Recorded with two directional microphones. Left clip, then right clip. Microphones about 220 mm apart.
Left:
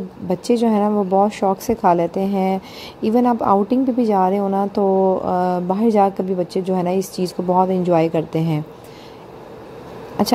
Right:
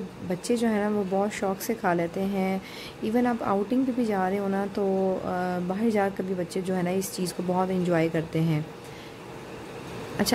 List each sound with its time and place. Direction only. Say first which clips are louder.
0.3 s a woman's voice: left 9 dB; 20° left (ahead or behind)
10.2 s speech: left 8 dB; 20° left (ahead or behind)